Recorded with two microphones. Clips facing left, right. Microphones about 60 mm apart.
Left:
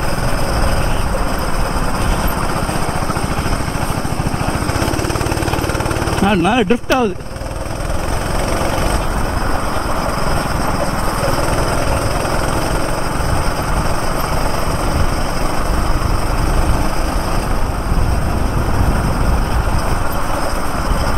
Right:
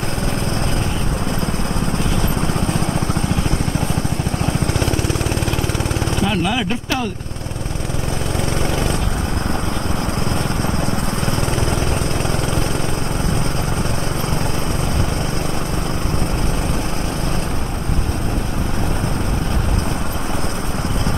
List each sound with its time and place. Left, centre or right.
6.2 s speech: left